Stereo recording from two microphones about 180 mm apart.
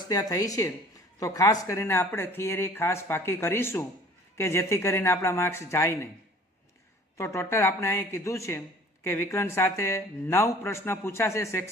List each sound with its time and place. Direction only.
0.0 s speech: 20° left (ahead or behind)
7.2 s speech: 15° left (ahead or behind)